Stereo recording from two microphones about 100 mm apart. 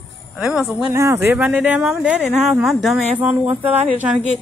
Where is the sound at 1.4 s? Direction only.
15° right (ahead or behind).